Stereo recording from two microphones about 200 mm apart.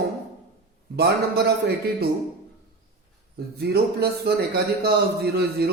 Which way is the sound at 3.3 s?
55° right (ahead or behind).